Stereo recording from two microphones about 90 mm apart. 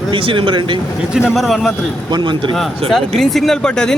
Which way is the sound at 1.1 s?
5° right (ahead or behind).